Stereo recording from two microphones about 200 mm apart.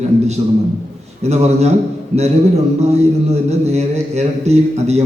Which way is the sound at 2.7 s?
35° right (ahead or behind).